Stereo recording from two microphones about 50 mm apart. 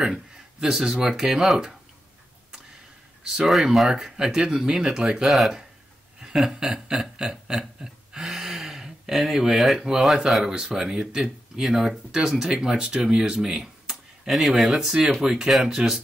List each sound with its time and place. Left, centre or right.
0.0 s speech: centre
3.3 s speech: centre
6.2 s a sound: centre
14.5 s speech: centre